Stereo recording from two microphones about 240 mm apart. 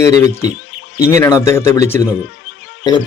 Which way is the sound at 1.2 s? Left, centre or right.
Centre.